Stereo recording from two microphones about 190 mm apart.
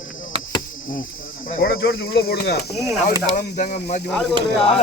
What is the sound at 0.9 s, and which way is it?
Speech, 45° left (ahead or behind).